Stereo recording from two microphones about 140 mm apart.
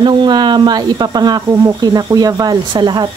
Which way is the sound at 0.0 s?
30° right (ahead or behind).